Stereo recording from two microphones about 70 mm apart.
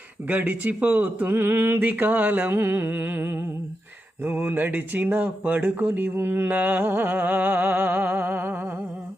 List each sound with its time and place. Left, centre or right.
0.3 s speech: right
1.8 s speech: right